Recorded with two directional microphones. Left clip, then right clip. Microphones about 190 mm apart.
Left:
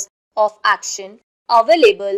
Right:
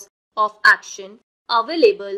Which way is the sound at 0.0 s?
20° left (ahead or behind).